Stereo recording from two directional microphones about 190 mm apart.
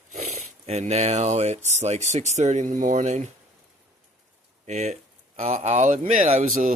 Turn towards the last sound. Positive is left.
turn(degrees=-40)  # may be behind; listen again after turning